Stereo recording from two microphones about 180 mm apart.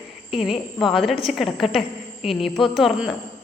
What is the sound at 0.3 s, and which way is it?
A man's voice, centre (ahead or behind).